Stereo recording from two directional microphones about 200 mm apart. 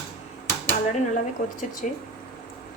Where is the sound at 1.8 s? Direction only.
40° left (ahead or behind).